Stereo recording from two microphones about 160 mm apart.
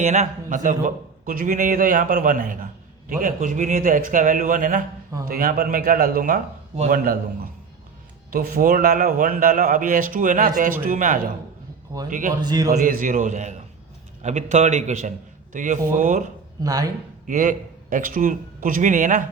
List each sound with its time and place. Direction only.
0.0 s a man's voice: 45° right (ahead or behind)
8.3 s a man's voice: 65° right (ahead or behind)
11.9 s a man's voice: 25° right (ahead or behind)
12.7 s a man's voice: 55° right (ahead or behind)
16.6 s a man's voice: 25° right (ahead or behind)
17.2 s a man's voice: 55° right (ahead or behind)